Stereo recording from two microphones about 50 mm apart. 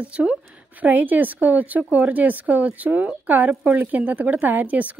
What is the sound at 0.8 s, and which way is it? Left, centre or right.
Speech, right.